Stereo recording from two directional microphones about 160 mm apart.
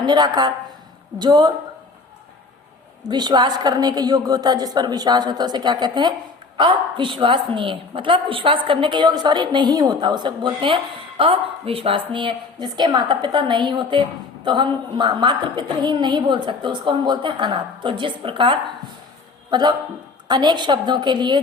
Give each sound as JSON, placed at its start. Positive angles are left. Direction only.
{"t": 0.0, "sound": "a woman's voice", "side_deg": -25}
{"t": 3.0, "sound": "a woman's voice", "side_deg": -25}